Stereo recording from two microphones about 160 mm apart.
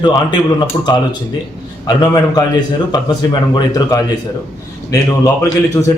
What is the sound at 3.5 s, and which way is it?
A man's voice, 25° left (ahead or behind).